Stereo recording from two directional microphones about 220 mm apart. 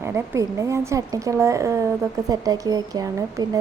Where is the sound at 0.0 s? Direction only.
10° right (ahead or behind).